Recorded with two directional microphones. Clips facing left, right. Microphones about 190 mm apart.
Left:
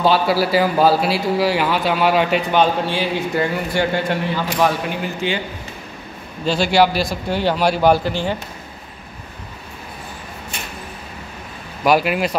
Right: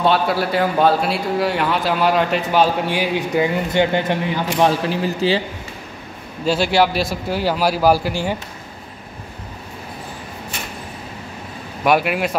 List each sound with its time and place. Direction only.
0.0 s a man's voice: 5° left (ahead or behind)
2.9 s a man's voice: 15° right (ahead or behind)
4.6 s a man's voice: 35° right (ahead or behind)
6.4 s a man's voice: 5° right (ahead or behind)
11.8 s a man's voice: centre (ahead or behind)